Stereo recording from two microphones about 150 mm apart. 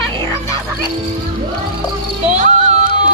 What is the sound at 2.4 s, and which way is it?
Music, 50° right (ahead or behind).